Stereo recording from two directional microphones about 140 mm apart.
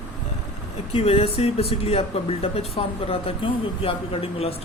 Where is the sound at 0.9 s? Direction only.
45° left (ahead or behind).